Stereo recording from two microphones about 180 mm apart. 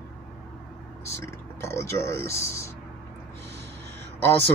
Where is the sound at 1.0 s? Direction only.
15° left (ahead or behind).